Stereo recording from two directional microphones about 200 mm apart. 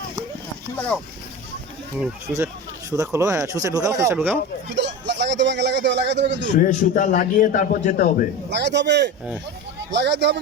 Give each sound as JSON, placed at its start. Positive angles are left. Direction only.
{"t": 2.3, "sound": "speech", "side_deg": 0}
{"t": 2.9, "sound": "speech", "side_deg": -15}
{"t": 4.7, "sound": "speech", "side_deg": -60}
{"t": 6.6, "sound": "a man's voice", "side_deg": 40}
{"t": 8.4, "sound": "a man's voice", "side_deg": -60}